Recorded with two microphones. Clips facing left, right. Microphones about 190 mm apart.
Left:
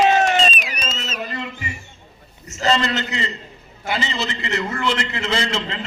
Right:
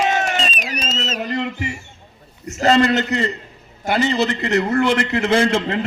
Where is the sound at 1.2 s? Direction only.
60° right (ahead or behind).